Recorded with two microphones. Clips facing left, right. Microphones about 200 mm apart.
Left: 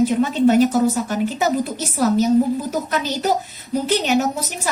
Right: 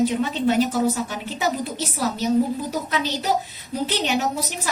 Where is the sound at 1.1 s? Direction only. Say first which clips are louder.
Left 6 dB; 45° left (ahead or behind).